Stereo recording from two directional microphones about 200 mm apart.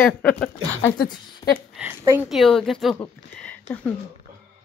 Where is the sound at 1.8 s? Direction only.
10° right (ahead or behind).